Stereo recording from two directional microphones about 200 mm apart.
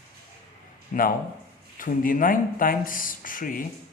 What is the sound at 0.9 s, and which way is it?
A man's voice, 45° left (ahead or behind).